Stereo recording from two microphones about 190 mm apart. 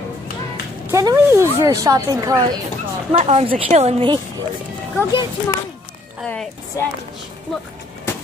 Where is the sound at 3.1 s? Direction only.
35° right (ahead or behind).